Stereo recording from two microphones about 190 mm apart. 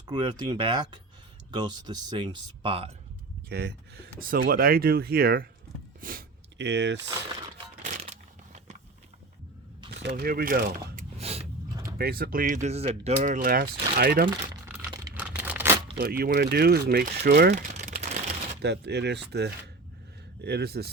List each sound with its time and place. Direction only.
0.1 s speech: 20° right (ahead or behind)
3.5 s speech: 60° right (ahead or behind)
4.2 s mechanisms: 50° right (ahead or behind)
6.0 s speech: 50° right (ahead or behind); by 7.1 s 65° right (ahead or behind)
7.8 s a sound: 40° right (ahead or behind)
9.9 s speech: 60° right (ahead or behind)
11.2 s mechanisms: 35° right (ahead or behind)
11.9 s mechanisms: 55° right (ahead or behind)
15.1 s tearing: 10° right (ahead or behind)
16.0 s speech: 55° right (ahead or behind)
17.5 s typing: 40° right (ahead or behind)
18.6 s speech: 60° right (ahead or behind)